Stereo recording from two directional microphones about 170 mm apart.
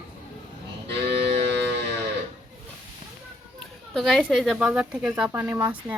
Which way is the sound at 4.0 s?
Centre (ahead or behind).